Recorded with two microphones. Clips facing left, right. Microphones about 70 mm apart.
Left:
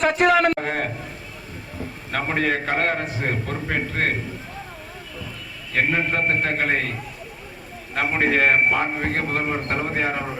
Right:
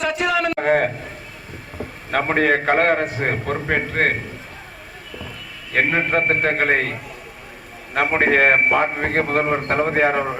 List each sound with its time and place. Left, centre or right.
0.0 s a man's voice: left
0.6 s a man's voice: right
2.0 s a man's voice: right
5.7 s a man's voice: right
8.0 s a man's voice: right